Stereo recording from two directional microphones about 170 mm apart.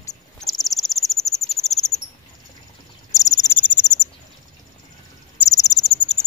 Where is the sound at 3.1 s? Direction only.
20° left (ahead or behind).